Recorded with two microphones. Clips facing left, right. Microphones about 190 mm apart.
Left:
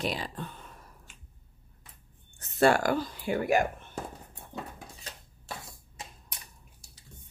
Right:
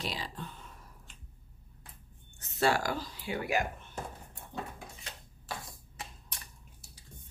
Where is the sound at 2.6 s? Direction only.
55° left (ahead or behind).